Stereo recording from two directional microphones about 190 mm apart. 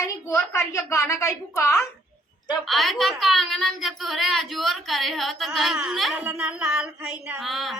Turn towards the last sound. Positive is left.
turn(degrees=0)  # may be behind; listen again after turning